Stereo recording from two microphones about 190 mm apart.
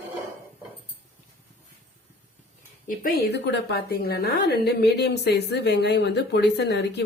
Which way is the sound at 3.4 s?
60° left (ahead or behind).